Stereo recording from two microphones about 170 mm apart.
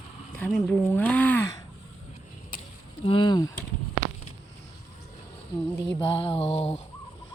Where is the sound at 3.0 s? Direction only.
30° left (ahead or behind).